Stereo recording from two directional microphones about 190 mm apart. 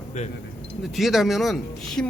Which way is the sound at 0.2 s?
35° left (ahead or behind).